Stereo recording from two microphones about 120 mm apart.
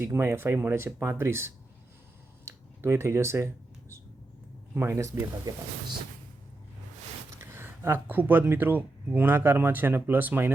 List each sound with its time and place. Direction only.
0.0 s speech: 20° right (ahead or behind)
2.4 s a sound: 25° right (ahead or behind)
4.7 s speech: 20° right (ahead or behind)
7.4 s speech: 20° right (ahead or behind)